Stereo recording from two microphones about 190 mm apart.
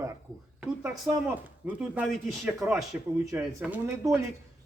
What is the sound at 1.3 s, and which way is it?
A man's voice, 10° right (ahead or behind).